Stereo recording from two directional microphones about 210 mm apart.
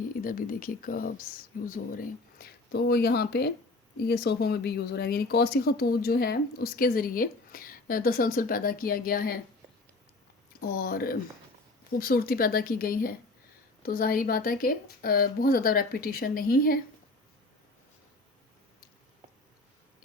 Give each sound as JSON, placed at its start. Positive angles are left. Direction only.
{"t": 0.0, "sound": "speech", "side_deg": 40}
{"t": 10.8, "sound": "speech", "side_deg": 45}